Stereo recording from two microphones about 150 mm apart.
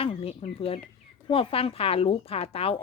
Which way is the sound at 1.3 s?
40° left (ahead or behind).